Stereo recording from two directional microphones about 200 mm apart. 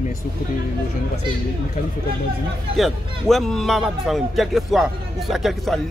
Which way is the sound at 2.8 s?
Centre (ahead or behind).